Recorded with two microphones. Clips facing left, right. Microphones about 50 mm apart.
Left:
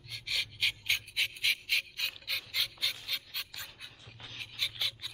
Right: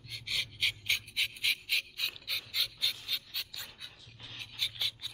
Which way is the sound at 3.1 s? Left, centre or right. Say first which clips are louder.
Even; centre.